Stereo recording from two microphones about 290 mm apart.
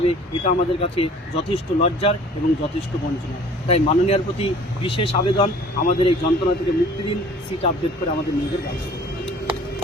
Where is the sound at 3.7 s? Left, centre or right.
Left.